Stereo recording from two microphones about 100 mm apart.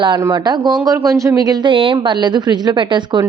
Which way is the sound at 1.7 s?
60° right (ahead or behind).